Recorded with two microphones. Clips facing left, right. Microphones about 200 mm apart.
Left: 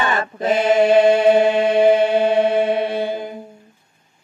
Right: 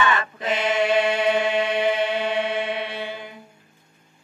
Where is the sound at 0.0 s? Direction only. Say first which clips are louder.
Left 3 dB; 40° left (ahead or behind).